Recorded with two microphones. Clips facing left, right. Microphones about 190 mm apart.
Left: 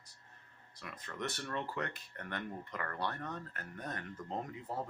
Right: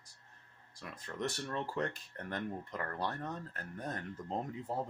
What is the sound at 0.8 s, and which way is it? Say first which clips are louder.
Speech: right 3 dB; 35° right (ahead or behind).